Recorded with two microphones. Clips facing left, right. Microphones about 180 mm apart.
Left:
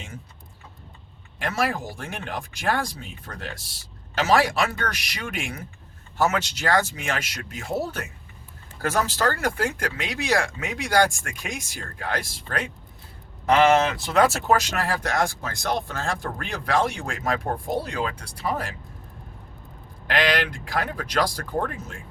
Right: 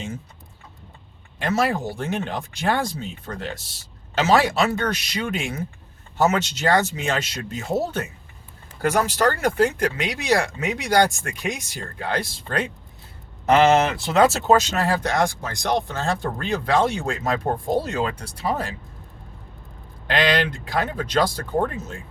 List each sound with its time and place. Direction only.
1.4 s speech: 25° right (ahead or behind)
20.1 s speech: 25° right (ahead or behind)